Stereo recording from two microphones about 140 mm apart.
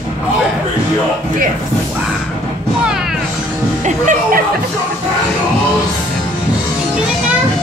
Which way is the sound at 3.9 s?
65° right (ahead or behind).